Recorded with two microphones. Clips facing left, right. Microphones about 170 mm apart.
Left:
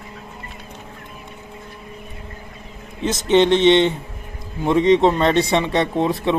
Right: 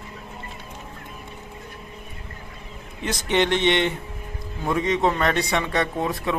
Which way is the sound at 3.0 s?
20° left (ahead or behind).